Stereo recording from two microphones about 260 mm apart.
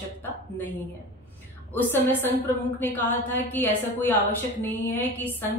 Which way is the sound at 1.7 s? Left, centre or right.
Centre.